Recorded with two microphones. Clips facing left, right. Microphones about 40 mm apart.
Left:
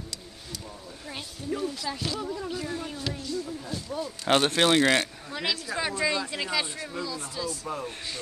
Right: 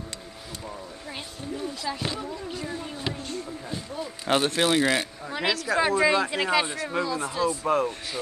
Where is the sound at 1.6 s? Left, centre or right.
Right.